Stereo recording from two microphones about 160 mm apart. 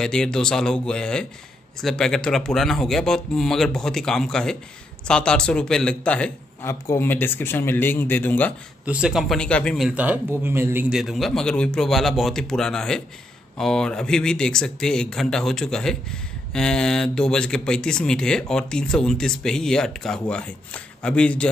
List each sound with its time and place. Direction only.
0.0 s speech: 5° left (ahead or behind)
8.8 s speech: 5° right (ahead or behind)
9.8 s speech: 10° right (ahead or behind)
11.0 s speech: centre (ahead or behind)